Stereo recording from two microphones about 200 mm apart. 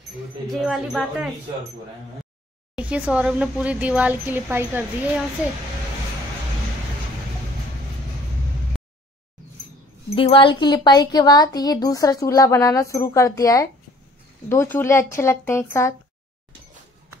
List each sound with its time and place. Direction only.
0.5 s speech: centre (ahead or behind)
2.7 s speech: 5° right (ahead or behind)
10.1 s speech: 25° left (ahead or behind)